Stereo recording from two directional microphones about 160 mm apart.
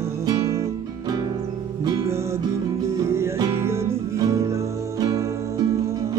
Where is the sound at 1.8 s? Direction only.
20° right (ahead or behind).